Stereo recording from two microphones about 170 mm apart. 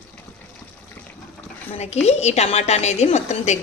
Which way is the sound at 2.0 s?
40° left (ahead or behind).